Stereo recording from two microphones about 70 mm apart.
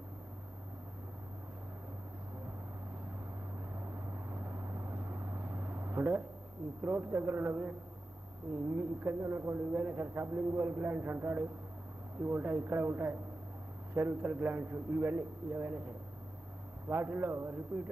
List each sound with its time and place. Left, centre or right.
3.8 s vehicle: right
6.8 s a man's voice: right
8.7 s a man's voice: right
16.9 s a man's voice: right